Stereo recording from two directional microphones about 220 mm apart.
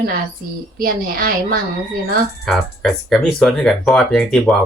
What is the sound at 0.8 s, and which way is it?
Speech, 40° right (ahead or behind).